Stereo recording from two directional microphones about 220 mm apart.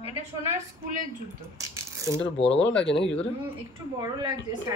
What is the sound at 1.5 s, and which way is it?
Coin, 15° right (ahead or behind).